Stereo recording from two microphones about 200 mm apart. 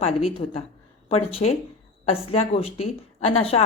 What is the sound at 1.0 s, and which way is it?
A woman's voice, 30° left (ahead or behind).